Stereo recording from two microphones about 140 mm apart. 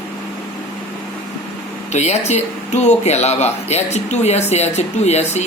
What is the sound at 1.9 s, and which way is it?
Speech, 50° left (ahead or behind).